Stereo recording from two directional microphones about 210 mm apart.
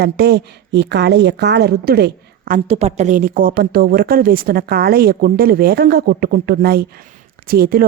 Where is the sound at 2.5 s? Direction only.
30° right (ahead or behind).